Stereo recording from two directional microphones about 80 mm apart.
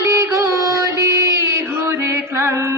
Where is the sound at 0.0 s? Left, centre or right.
Right.